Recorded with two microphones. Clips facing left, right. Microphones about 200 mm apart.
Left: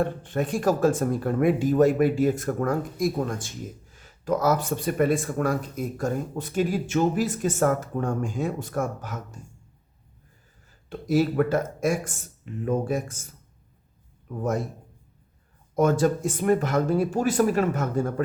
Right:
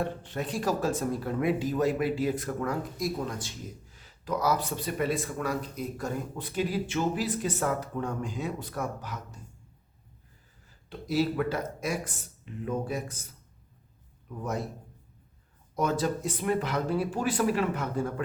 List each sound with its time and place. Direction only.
0.0 s speech: 50° left (ahead or behind)
10.8 s speech: 50° left (ahead or behind)
14.3 s speech: 50° left (ahead or behind)
15.7 s speech: 50° left (ahead or behind)